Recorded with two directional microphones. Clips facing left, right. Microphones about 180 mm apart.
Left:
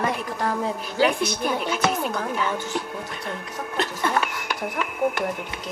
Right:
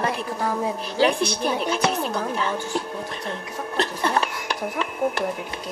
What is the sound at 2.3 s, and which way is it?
Speech, 35° right (ahead or behind).